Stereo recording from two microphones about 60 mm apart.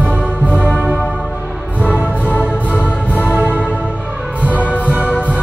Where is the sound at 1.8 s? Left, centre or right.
Right.